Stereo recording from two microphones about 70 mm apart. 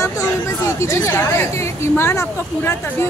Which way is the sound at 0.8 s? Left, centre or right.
Left.